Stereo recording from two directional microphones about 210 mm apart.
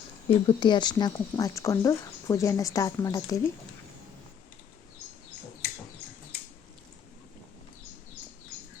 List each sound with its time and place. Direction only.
0.3 s speech: 25° left (ahead or behind)